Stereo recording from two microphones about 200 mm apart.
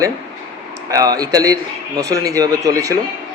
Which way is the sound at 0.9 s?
15° right (ahead or behind).